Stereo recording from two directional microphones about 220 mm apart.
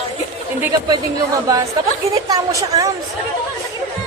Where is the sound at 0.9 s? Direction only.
15° right (ahead or behind).